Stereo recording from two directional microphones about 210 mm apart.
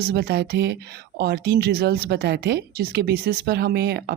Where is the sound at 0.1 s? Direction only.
50° right (ahead or behind).